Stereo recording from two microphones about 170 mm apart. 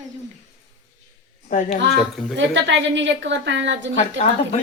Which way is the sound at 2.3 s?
90° right.